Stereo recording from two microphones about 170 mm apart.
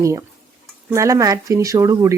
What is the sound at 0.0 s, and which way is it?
Speech, 20° right (ahead or behind).